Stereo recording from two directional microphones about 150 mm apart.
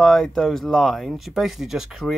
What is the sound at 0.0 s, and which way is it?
Speech, centre (ahead or behind).